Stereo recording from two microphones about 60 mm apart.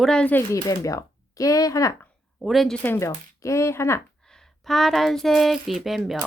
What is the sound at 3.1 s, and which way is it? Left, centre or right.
Speech, left.